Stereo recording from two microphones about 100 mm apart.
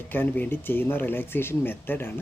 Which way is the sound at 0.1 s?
20° left (ahead or behind).